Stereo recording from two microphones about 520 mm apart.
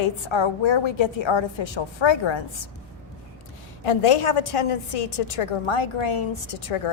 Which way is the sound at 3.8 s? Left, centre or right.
Left.